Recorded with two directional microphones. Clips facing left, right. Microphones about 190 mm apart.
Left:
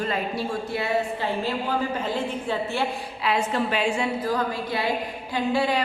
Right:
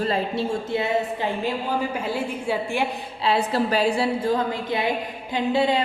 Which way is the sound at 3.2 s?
35° right (ahead or behind).